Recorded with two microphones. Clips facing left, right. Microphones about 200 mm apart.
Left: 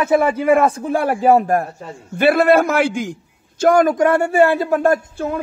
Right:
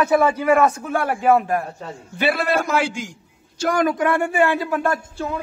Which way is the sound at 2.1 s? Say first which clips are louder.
Left 8 dB; 55° left (ahead or behind).